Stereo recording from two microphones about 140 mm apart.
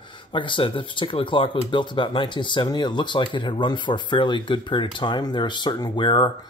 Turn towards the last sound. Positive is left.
turn(degrees=35)  # may be behind; listen again after turning